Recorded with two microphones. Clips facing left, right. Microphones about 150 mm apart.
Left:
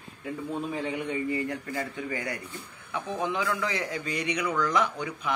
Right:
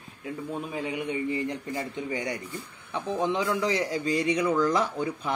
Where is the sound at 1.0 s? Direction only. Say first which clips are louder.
Right 1 dB; 15° right (ahead or behind).